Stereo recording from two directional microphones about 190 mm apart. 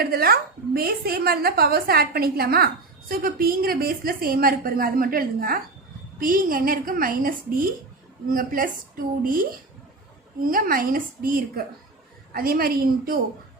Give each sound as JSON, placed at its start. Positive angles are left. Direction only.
{"t": 0.0, "sound": "a woman's voice", "side_deg": -55}